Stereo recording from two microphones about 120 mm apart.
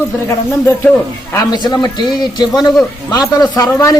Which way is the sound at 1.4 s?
35° left (ahead or behind).